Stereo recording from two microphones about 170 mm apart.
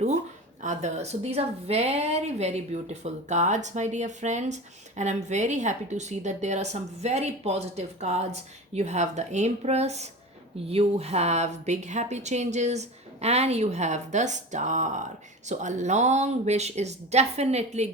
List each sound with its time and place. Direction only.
0.6 s speech: 45° right (ahead or behind)